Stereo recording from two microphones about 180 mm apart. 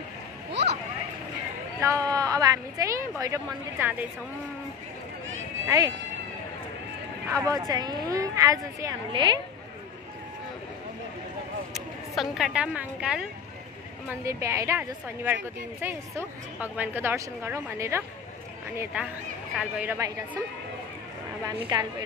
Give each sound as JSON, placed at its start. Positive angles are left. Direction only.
{"t": 0.5, "sound": "a sound", "side_deg": -75}
{"t": 1.8, "sound": "speech", "side_deg": -20}
{"t": 5.7, "sound": "speech", "side_deg": -20}
{"t": 7.4, "sound": "speech", "side_deg": -20}
{"t": 11.7, "sound": "speech", "side_deg": 0}
{"t": 14.0, "sound": "a woman's voice", "side_deg": -15}
{"t": 21.5, "sound": "speech", "side_deg": -20}